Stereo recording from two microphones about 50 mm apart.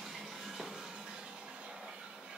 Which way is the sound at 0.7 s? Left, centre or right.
Centre.